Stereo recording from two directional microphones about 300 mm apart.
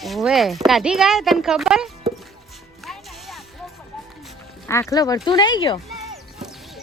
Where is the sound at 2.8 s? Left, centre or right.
Centre.